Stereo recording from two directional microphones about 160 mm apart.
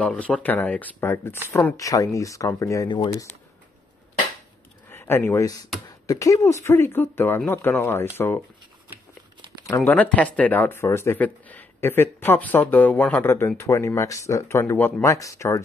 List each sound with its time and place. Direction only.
0.0 s speech: 5° left (ahead or behind)
1.8 s speech: 20° left (ahead or behind)
4.8 s speech: 15° left (ahead or behind)
9.8 s speech: 10° left (ahead or behind)